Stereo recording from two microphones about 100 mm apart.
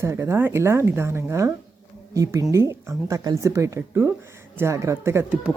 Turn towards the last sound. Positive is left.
turn(degrees=-30)  # may be behind; listen again after turning